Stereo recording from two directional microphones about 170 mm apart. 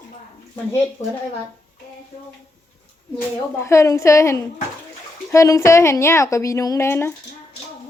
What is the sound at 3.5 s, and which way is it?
A woman's voice, 15° left (ahead or behind).